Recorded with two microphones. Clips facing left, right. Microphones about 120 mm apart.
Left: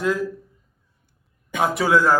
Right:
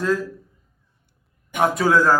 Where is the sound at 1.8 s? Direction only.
15° left (ahead or behind).